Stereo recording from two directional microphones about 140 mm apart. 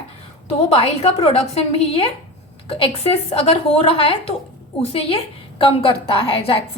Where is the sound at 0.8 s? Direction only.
45° left (ahead or behind).